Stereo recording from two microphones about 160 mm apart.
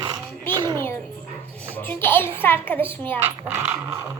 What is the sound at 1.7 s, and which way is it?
Speech, 10° left (ahead or behind).